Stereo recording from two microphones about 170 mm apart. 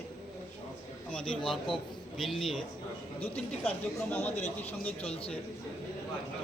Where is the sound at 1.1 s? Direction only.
5° left (ahead or behind).